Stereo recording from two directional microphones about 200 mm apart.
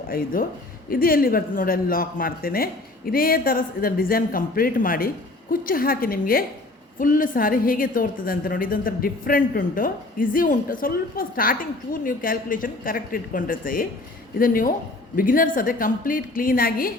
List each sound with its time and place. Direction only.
0.1 s a woman's voice: 45° left (ahead or behind)